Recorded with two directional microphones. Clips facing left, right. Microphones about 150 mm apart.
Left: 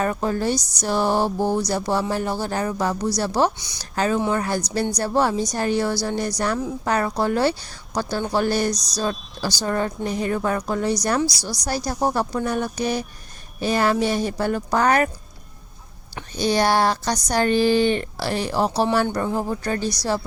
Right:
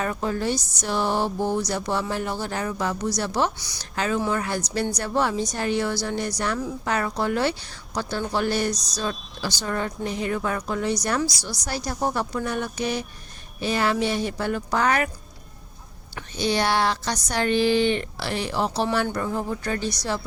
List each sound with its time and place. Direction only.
0.0 s speech: 40° left (ahead or behind)
16.3 s speech: 40° left (ahead or behind)